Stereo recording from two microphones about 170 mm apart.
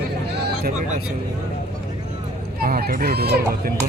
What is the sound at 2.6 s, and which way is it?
Speech, 60° right (ahead or behind).